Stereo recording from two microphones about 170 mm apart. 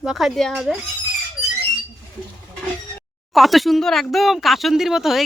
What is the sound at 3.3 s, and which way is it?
Speech, centre (ahead or behind).